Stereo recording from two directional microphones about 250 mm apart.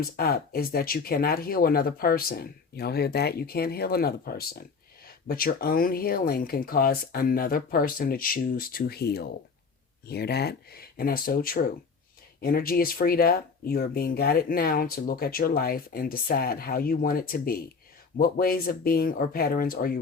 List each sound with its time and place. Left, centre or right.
0.0 s speech: left